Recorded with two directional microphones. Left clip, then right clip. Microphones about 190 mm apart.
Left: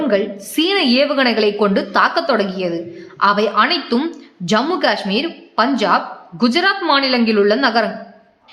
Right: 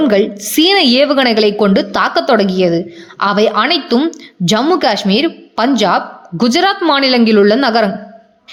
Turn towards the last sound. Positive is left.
turn(degrees=-45)  # may be behind; listen again after turning